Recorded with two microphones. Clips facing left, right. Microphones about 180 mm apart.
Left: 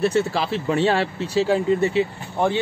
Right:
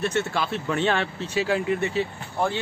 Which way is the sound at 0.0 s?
30° left (ahead or behind).